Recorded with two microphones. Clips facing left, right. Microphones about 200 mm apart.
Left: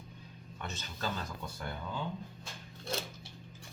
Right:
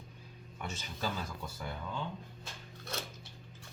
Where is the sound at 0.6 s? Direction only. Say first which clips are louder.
Right 1 dB; 10° right (ahead or behind).